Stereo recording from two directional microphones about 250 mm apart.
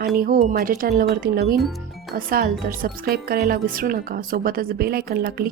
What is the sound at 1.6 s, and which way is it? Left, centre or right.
Music, centre.